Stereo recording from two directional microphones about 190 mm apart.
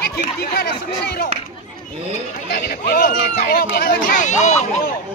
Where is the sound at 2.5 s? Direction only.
50° left (ahead or behind).